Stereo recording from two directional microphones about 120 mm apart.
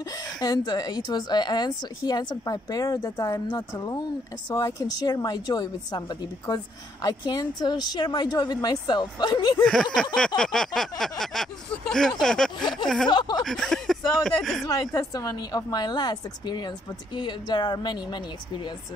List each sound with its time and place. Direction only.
0.1 s a woman's voice: 30° left (ahead or behind)
10.1 s speech: 5° left (ahead or behind)
13.1 s a woman's voice: 40° left (ahead or behind)
13.4 s speech: 5° left (ahead or behind)
14.7 s a woman's voice: 30° left (ahead or behind)